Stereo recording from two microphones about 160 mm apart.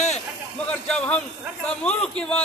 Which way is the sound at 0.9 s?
5° left (ahead or behind).